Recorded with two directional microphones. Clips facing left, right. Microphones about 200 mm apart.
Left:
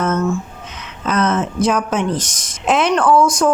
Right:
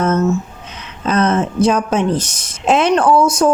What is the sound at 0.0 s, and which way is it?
Music, 30° right (ahead or behind).